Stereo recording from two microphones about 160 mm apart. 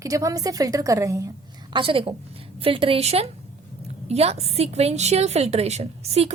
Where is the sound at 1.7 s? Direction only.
35° right (ahead or behind).